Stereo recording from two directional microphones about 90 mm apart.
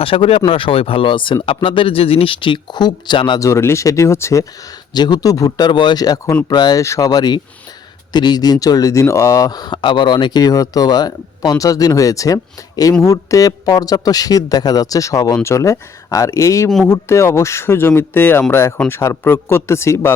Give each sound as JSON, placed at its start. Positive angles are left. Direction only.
{"t": 0.0, "sound": "speech", "side_deg": 90}
{"t": 3.4, "sound": "speech", "side_deg": 30}
{"t": 4.9, "sound": "speech", "side_deg": 50}
{"t": 6.7, "sound": "speech", "side_deg": 35}
{"t": 7.1, "sound": "speech", "side_deg": 50}
{"t": 16.6, "sound": "speech", "side_deg": 0}
{"t": 16.9, "sound": "speech", "side_deg": 30}